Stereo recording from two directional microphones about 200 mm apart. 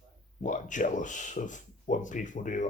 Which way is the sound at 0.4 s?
40° left (ahead or behind).